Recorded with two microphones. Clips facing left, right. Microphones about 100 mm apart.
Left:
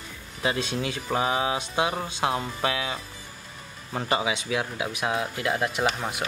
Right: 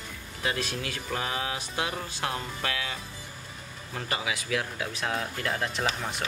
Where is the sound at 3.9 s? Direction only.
30° left (ahead or behind); by 5.9 s 10° left (ahead or behind).